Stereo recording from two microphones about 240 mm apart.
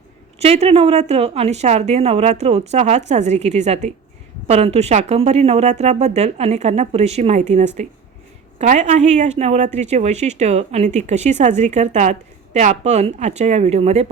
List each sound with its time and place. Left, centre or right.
0.3 s speech: right